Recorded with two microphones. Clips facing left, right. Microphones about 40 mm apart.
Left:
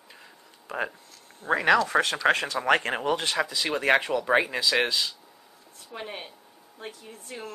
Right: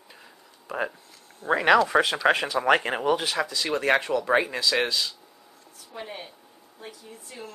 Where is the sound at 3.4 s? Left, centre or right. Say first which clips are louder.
Right 1 dB; centre.